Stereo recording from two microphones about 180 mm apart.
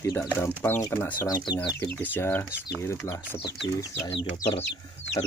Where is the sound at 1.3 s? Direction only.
25° left (ahead or behind).